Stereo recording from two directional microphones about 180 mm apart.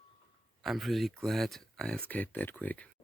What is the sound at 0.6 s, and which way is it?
Speech, centre (ahead or behind).